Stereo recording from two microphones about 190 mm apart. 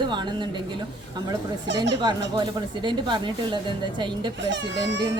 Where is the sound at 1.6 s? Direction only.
65° right (ahead or behind).